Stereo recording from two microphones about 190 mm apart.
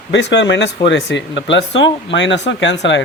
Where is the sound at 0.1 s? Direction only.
65° left (ahead or behind).